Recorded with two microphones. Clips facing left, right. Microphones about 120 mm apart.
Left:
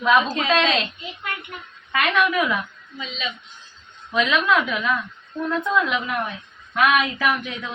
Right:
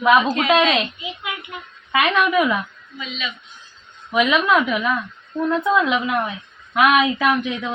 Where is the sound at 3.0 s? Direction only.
35° left (ahead or behind).